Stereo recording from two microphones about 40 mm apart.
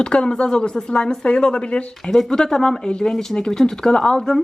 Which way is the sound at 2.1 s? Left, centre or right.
Centre.